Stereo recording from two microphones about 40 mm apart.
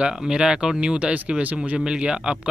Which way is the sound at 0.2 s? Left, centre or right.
Centre.